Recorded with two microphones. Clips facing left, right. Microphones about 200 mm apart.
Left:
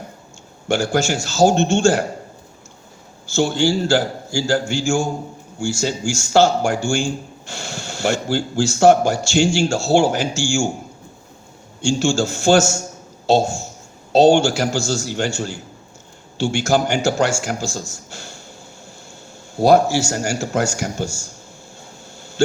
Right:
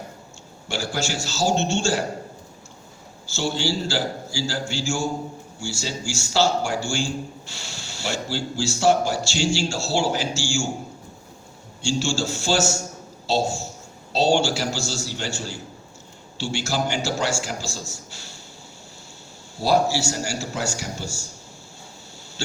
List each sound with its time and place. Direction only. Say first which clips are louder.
0.7 s a man's voice: left 9 dB; 50° left (ahead or behind)
3.2 s a man's voice: left 7 dB; 50° left (ahead or behind)
11.8 s a man's voice: left 6 dB; 50° left (ahead or behind)
19.5 s a man's voice: left 7 dB; 50° left (ahead or behind)
22.4 s a sound: left 11 dB; 50° left (ahead or behind)